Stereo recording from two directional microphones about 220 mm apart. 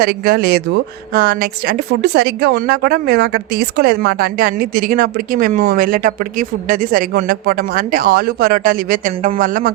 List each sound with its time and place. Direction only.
0.0 s a woman's voice: 45° right (ahead or behind)